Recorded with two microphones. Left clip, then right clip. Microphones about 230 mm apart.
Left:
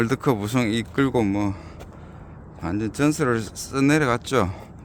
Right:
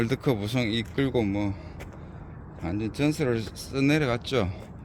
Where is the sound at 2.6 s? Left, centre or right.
Left.